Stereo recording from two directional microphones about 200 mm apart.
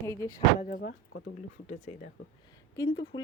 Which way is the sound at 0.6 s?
45° left (ahead or behind).